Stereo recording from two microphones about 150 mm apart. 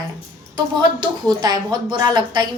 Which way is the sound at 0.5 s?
25° right (ahead or behind).